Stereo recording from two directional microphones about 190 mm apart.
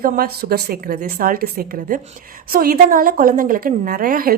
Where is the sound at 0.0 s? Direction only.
55° right (ahead or behind).